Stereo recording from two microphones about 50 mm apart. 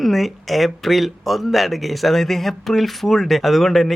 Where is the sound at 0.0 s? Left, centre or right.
Centre.